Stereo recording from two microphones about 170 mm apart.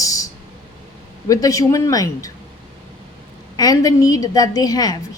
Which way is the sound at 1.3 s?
20° left (ahead or behind).